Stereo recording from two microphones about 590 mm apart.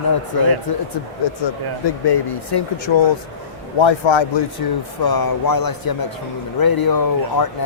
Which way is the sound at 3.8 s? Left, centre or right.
Left.